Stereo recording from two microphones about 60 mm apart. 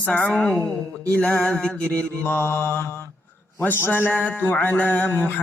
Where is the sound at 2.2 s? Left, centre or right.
Left.